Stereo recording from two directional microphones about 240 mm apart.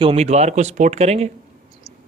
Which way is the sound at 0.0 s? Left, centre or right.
Right.